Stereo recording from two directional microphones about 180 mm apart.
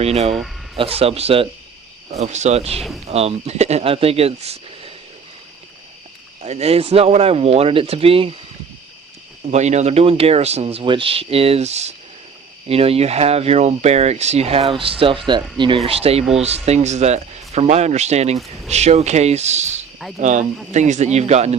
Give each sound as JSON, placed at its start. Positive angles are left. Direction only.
{"t": 0.0, "sound": "speech", "side_deg": -35}
{"t": 2.7, "sound": "speech", "side_deg": 0}
{"t": 3.1, "sound": "speech", "side_deg": -35}
{"t": 6.4, "sound": "speech", "side_deg": -35}
{"t": 9.5, "sound": "speech", "side_deg": -40}